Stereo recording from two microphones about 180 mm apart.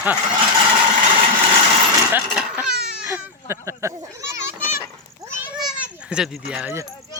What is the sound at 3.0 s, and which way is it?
Children playing, 15° right (ahead or behind).